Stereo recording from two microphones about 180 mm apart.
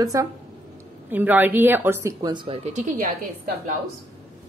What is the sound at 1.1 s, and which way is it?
A woman's voice, 10° right (ahead or behind).